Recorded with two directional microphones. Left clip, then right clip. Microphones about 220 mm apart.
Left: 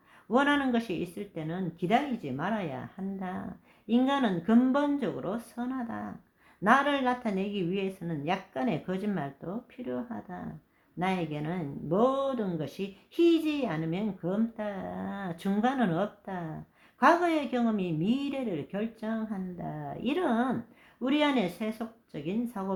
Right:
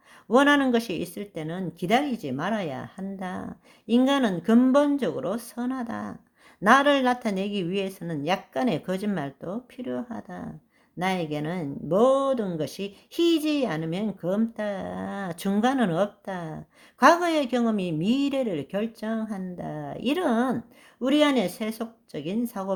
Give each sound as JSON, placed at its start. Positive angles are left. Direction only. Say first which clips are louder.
{"t": 0.3, "sound": "speech", "louder": "right 6 dB", "side_deg": -40}